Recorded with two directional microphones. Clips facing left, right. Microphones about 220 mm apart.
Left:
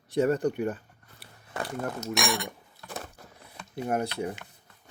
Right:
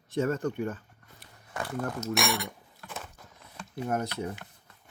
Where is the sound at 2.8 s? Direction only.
35° left (ahead or behind).